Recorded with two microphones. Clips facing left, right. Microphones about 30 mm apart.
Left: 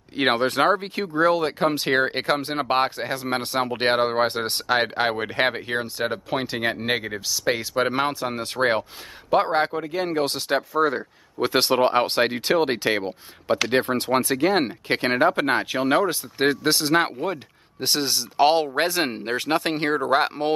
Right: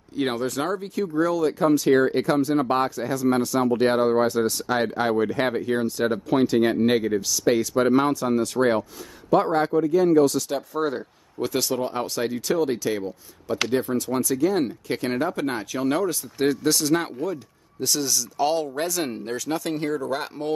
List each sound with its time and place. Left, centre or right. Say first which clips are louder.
0.1 s speech: left 4 dB; left
5.9 s speech: right 3 dB; left
11.0 s speech: left 3 dB; left
11.5 s speech: left 7 dB; left